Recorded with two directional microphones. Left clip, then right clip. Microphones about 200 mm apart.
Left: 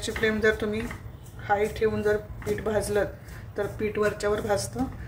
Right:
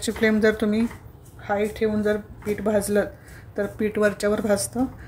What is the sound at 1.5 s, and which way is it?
A woman's voice, 30° right (ahead or behind).